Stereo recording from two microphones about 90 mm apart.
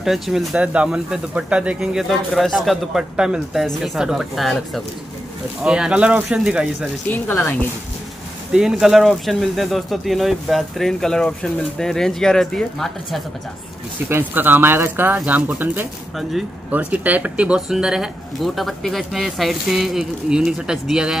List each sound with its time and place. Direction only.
0.0 s speech: 5° right (ahead or behind)
8.5 s speech: 5° right (ahead or behind)
14.0 s speech: 20° right (ahead or behind); by 21.2 s 5° right (ahead or behind)